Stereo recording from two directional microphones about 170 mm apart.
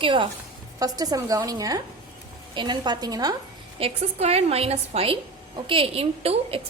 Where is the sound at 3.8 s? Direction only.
40° right (ahead or behind).